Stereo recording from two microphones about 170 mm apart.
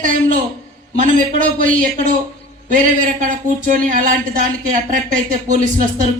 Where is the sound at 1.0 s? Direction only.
50° right (ahead or behind).